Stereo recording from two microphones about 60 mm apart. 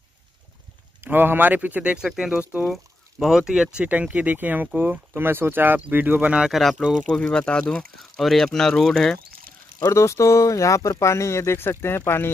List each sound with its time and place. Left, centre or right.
1.0 s speech: right
6.5 s speech: centre
7.1 s speech: centre
8.0 s speech: centre
9.8 s speech: left